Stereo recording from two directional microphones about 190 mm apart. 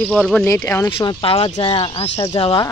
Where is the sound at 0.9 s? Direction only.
30° left (ahead or behind).